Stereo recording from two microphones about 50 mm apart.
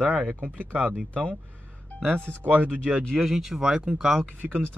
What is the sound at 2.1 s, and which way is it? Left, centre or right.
Speech, right.